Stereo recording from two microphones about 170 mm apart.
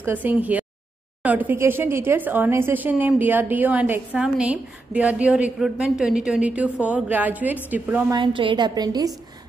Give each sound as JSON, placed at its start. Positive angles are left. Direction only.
{"t": 0.0, "sound": "speech", "side_deg": -10}
{"t": 8.1, "sound": "a woman's voice", "side_deg": -30}